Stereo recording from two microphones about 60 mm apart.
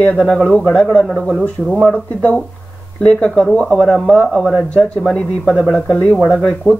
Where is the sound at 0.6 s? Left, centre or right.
Centre.